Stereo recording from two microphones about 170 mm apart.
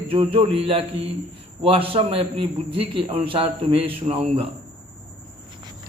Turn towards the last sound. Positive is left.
turn(degrees=-35)  # may be behind; listen again after turning